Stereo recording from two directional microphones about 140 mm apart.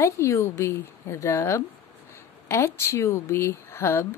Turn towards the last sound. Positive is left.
turn(degrees=20)  # may be behind; listen again after turning